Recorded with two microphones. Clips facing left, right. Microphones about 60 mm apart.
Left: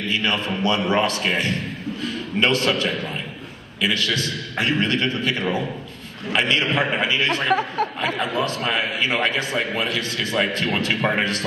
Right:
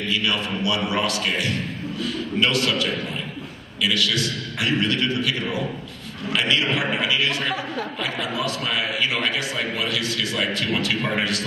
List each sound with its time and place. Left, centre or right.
0.1 s a man's voice: left